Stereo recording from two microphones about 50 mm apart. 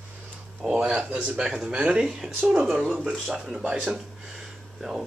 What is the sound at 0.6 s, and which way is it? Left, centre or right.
Speech, centre.